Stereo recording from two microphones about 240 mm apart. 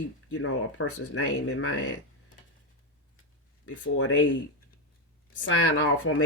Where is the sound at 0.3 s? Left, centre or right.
Left.